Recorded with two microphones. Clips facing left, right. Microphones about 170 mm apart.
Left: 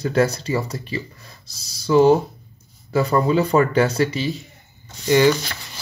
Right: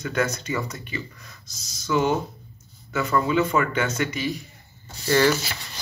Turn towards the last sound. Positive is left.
turn(degrees=-5)  # may be behind; listen again after turning